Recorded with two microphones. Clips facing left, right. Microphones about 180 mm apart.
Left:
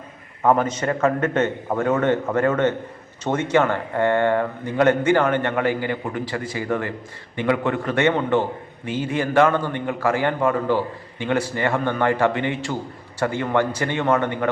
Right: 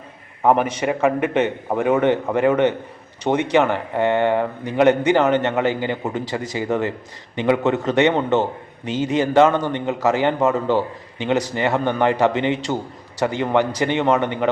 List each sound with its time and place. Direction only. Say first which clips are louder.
0.4 s a man's voice: right 1 dB; 10° right (ahead or behind)